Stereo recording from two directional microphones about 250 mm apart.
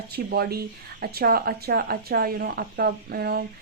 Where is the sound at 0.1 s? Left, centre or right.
Right.